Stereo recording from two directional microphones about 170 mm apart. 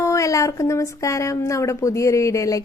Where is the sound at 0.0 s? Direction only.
20° left (ahead or behind).